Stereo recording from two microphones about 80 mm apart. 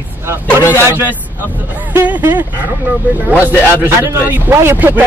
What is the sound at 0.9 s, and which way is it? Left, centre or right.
Speech, right.